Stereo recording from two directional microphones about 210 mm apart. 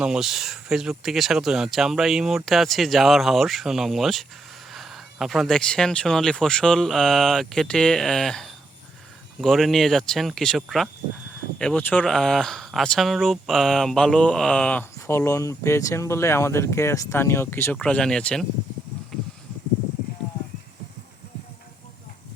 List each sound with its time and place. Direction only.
0.0 s speech: centre (ahead or behind)